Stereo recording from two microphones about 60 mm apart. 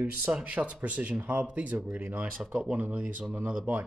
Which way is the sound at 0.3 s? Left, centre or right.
Right.